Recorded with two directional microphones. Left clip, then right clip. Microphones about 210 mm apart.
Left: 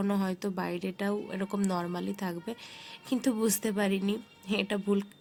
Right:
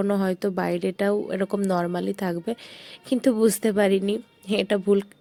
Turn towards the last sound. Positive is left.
turn(degrees=-30)  # may be behind; listen again after turning